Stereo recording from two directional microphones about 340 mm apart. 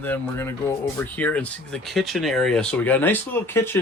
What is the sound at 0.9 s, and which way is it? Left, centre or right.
Speech, centre.